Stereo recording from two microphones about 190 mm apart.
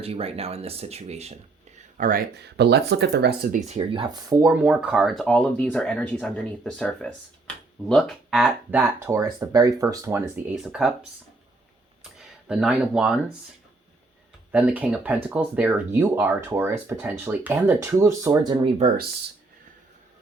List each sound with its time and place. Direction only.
0.0 s speech: 30° right (ahead or behind)
2.0 s speech: 50° right (ahead or behind)
3.7 s speech: 25° right (ahead or behind); by 10.9 s centre (ahead or behind)
12.5 s speech: 5° right (ahead or behind)
14.5 s speech: 5° right (ahead or behind)